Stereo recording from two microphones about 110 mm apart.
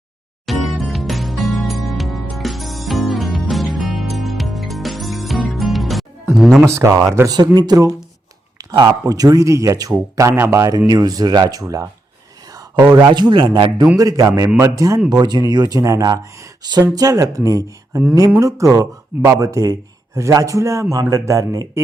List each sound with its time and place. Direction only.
0.4 s music: centre (ahead or behind)
6.3 s speech: centre (ahead or behind)
6.7 s speech: 25° right (ahead or behind)
7.3 s speech: 40° right (ahead or behind)
12.5 s a sound: 35° right (ahead or behind)
12.9 s speech: 40° right (ahead or behind)